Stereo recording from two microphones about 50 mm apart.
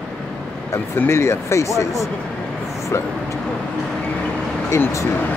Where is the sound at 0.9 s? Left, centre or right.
Left.